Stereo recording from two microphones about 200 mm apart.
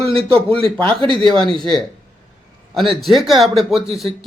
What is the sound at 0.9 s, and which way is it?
Speech, 25° right (ahead or behind).